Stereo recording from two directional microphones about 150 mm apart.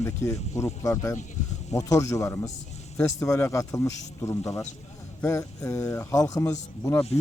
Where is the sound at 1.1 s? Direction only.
50° left (ahead or behind).